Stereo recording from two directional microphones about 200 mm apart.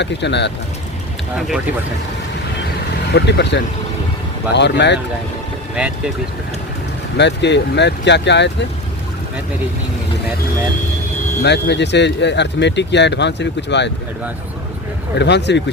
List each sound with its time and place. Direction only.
0.0 s speech: 60° left (ahead or behind)
1.4 s speech: centre (ahead or behind)
3.1 s speech: 55° left (ahead or behind)
7.2 s speech: 60° left (ahead or behind)
11.4 s speech: 60° left (ahead or behind)
15.2 s speech: 60° left (ahead or behind)